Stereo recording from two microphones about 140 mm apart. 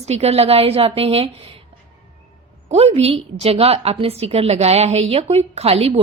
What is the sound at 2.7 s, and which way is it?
A woman's voice, 45° right (ahead or behind).